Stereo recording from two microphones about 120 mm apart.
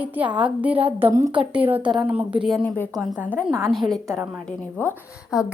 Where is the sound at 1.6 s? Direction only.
55° right (ahead or behind).